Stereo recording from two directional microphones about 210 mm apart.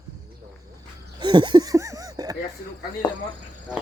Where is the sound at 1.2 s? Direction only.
20° right (ahead or behind).